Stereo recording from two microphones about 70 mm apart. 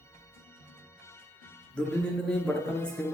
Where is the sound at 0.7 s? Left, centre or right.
Left.